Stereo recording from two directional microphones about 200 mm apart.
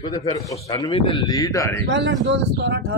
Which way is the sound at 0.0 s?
20° left (ahead or behind).